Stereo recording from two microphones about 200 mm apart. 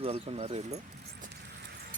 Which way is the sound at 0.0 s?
30° right (ahead or behind).